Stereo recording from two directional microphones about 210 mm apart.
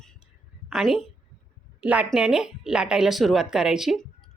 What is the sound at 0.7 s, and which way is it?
A woman's voice, centre (ahead or behind).